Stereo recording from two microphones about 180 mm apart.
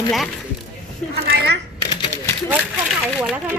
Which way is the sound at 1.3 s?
70° right (ahead or behind).